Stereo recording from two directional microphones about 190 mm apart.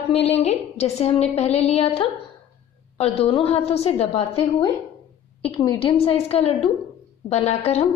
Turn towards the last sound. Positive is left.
turn(degrees=35)  # may be behind; listen again after turning